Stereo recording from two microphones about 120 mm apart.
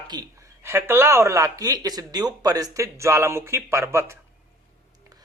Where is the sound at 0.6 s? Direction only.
20° right (ahead or behind).